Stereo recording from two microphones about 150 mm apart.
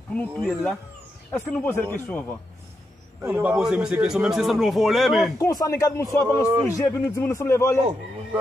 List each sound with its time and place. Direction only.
0.1 s a man's voice: 5° left (ahead or behind)
3.2 s a man's voice: 15° right (ahead or behind); by 5.3 s centre (ahead or behind)
5.4 s a man's voice: 25° left (ahead or behind)